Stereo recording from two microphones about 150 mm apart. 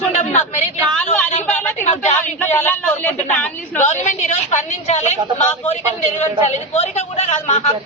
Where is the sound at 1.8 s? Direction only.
50° left (ahead or behind).